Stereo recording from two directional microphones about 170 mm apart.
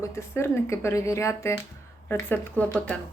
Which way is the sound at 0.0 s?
15° left (ahead or behind).